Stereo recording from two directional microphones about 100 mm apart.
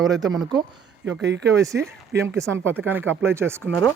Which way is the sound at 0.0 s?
40° right (ahead or behind).